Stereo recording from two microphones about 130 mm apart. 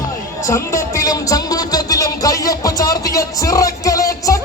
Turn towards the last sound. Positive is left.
turn(degrees=25)  # may be behind; listen again after turning